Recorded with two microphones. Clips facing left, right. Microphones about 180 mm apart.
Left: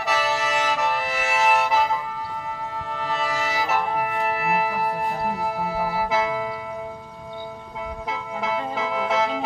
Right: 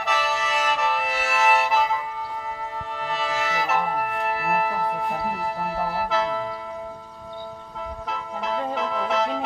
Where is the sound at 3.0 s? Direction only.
Centre (ahead or behind).